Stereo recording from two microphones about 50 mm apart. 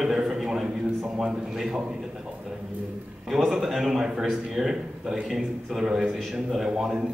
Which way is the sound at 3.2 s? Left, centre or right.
Centre.